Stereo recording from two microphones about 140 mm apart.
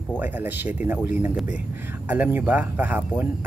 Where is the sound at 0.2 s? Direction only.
15° right (ahead or behind).